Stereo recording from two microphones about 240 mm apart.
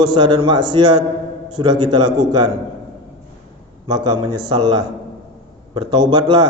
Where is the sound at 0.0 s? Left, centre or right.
Centre.